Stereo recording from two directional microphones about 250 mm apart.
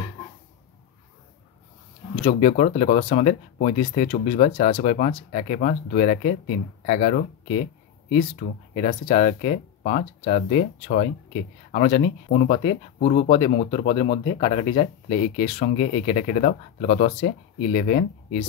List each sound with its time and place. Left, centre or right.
2.2 s speech: left